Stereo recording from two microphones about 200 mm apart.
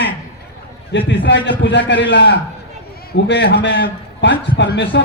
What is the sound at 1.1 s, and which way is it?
A man's voice, 60° left (ahead or behind).